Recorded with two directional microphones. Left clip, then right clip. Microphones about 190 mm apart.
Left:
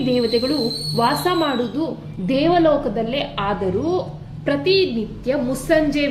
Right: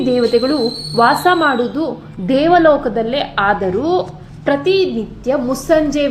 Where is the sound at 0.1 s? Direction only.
20° right (ahead or behind).